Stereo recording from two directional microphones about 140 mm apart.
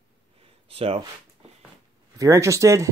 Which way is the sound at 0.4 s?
45° right (ahead or behind).